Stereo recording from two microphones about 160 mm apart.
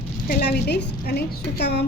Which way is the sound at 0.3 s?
80° left.